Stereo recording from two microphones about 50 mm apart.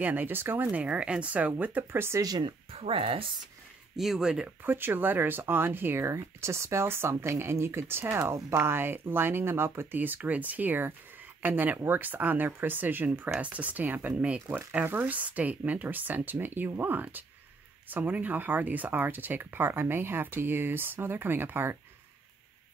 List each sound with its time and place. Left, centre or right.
0.0 s speech: right
1.9 s speech: right
3.9 s speech: centre
4.6 s speech: right
6.0 s speech: right
9.9 s speech: right